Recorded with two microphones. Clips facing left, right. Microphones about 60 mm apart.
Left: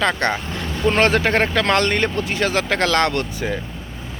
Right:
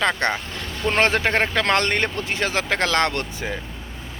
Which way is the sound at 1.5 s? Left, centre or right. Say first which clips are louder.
Left 2 dB; right.